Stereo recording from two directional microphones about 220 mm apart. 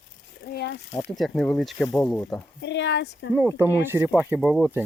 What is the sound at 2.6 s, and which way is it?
Speech, 50° left (ahead or behind).